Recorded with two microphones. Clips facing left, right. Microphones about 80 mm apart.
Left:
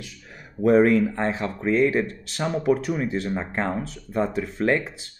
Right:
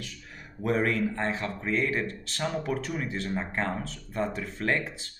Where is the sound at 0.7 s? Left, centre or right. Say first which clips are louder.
Left 9 dB; left.